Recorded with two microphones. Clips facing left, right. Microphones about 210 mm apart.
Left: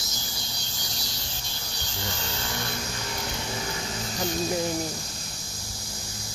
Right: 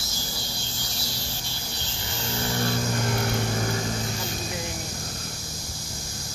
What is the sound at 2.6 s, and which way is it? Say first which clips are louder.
Vehicle: right 8 dB; 50° right (ahead or behind).